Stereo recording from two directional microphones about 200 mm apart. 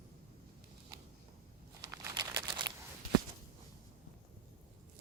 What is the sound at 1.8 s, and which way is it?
Crumpling, 15° right (ahead or behind).